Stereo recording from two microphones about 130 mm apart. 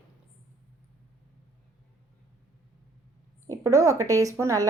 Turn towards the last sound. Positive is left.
turn(degrees=-25)  # may be behind; listen again after turning